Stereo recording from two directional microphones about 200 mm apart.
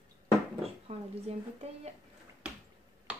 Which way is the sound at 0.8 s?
30° right (ahead or behind).